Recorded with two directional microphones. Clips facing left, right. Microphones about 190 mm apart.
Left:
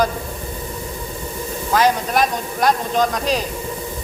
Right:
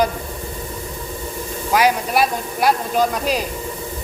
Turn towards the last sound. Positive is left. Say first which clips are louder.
# even
turn(degrees=-10)  # may be behind; listen again after turning